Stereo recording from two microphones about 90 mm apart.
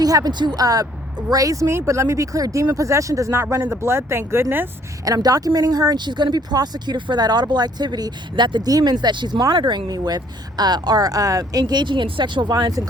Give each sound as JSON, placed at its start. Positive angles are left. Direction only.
{"t": 0.0, "sound": "speech", "side_deg": -45}
{"t": 5.0, "sound": "speech", "side_deg": -40}
{"t": 11.6, "sound": "speech", "side_deg": -55}